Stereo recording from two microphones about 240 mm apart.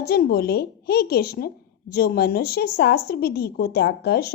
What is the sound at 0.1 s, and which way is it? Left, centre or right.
A woman's voice, left.